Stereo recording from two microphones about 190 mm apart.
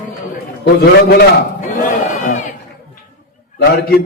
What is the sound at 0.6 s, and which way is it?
Speech, 55° left (ahead or behind).